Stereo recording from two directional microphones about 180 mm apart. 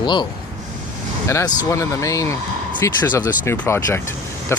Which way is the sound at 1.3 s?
15° left (ahead or behind).